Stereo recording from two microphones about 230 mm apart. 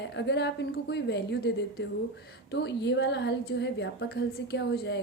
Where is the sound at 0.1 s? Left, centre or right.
Left.